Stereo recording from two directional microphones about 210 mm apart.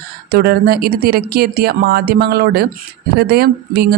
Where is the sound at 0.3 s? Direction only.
50° right (ahead or behind).